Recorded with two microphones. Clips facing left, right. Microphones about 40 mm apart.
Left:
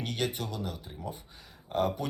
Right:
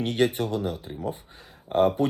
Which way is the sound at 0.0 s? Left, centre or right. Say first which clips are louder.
Right 9 dB; right.